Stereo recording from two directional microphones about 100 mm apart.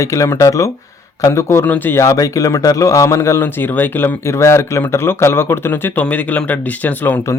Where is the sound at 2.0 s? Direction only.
35° left (ahead or behind); by 7.2 s 20° left (ahead or behind).